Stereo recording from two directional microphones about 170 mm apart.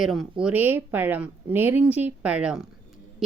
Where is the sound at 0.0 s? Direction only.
Centre (ahead or behind).